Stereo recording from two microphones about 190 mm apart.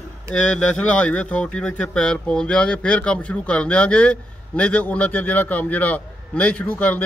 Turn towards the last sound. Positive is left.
turn(degrees=10)  # may be behind; listen again after turning